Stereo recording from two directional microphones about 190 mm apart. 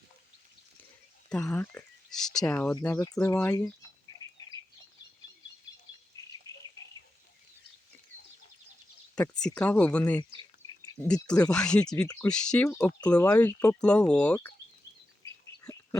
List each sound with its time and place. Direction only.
1.3 s speech: 5° left (ahead or behind)
6.2 s bird: 20° left (ahead or behind)
9.1 s speech: 5° left (ahead or behind)